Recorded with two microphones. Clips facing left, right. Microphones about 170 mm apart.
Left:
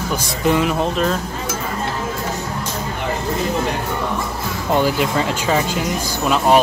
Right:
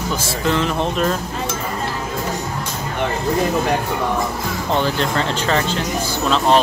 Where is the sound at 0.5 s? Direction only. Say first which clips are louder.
Left 3 dB; 10° left (ahead or behind).